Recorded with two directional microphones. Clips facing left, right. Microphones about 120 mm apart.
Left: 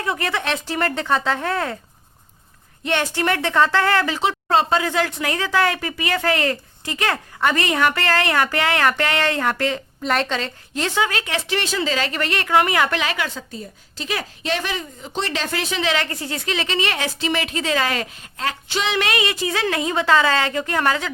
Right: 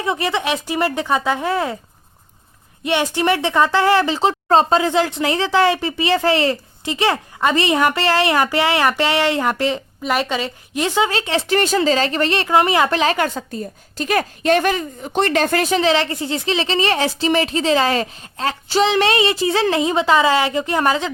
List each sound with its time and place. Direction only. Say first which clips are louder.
0.0 s speech: right 3 dB; 20° right (ahead or behind)
2.8 s a woman's voice: right 3 dB; 15° right (ahead or behind)
10.0 s speech: right 1 dB; 5° right (ahead or behind)
11.1 s a woman's voice: right 5 dB; 30° right (ahead or behind)
11.5 s a woman's voice: right 7 dB; 45° right (ahead or behind); by 12.9 s 25° right (ahead or behind)
12.9 s a woman's voice: right 6 dB; 40° right (ahead or behind)
16.0 s a woman's voice: right 5 dB; 25° right (ahead or behind)
19.8 s a woman's voice: left 1 dB; 20° right (ahead or behind)